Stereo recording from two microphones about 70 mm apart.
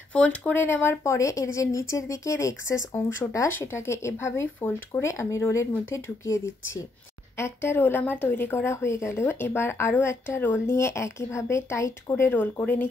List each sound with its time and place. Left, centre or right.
0.1 s speech: centre
0.4 s speech: left
1.0 s speech: left
4.6 s speech: left
5.0 s speech: left
12.3 s speech: left